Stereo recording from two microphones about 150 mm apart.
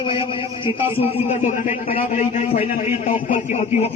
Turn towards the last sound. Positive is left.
turn(degrees=50)  # may be behind; listen again after turning